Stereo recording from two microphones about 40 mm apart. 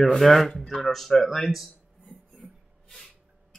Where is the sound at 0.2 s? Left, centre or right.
Centre.